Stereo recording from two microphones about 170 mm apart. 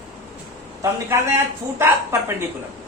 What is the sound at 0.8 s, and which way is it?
A woman's voice, 15° right (ahead or behind).